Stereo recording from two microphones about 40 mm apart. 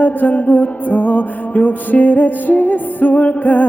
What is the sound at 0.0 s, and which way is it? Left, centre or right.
Music, left.